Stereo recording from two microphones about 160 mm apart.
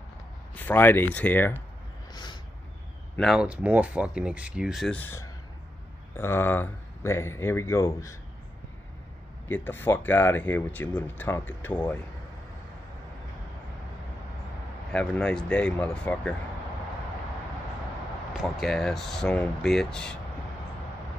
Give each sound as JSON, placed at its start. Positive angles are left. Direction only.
{"t": 0.6, "sound": "speech", "side_deg": 10}
{"t": 3.2, "sound": "speech", "side_deg": -5}
{"t": 4.9, "sound": "speech", "side_deg": 15}
{"t": 9.5, "sound": "speech", "side_deg": 15}
{"t": 14.9, "sound": "speech", "side_deg": 5}
{"t": 18.3, "sound": "speech", "side_deg": 0}